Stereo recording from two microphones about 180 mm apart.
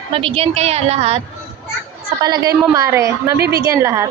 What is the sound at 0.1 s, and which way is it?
A woman's voice, 30° right (ahead or behind).